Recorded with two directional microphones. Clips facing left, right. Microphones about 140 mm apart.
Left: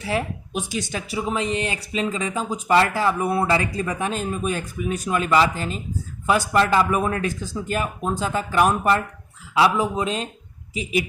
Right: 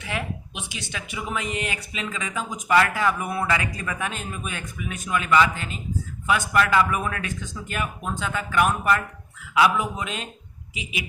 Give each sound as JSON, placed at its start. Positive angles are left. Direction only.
{"t": 0.0, "sound": "speech", "side_deg": 35}